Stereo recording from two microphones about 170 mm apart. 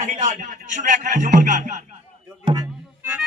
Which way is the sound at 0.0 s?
45° right (ahead or behind).